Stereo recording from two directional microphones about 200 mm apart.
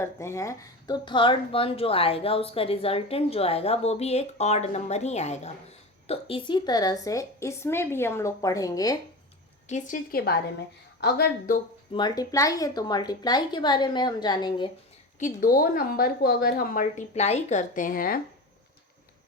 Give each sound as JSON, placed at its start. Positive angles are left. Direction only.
{"t": 0.0, "sound": "a woman's voice", "side_deg": 15}
{"t": 9.6, "sound": "a woman's voice", "side_deg": 40}
{"t": 11.9, "sound": "speech", "side_deg": 20}
{"t": 15.2, "sound": "a woman's voice", "side_deg": 45}